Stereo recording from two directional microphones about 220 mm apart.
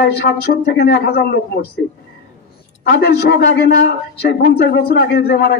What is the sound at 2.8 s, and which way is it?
A man's voice, 50° left (ahead or behind).